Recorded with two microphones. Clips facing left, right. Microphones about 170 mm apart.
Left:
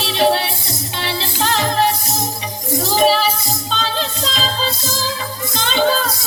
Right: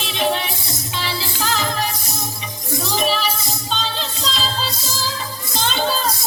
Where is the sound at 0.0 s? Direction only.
35° left (ahead or behind).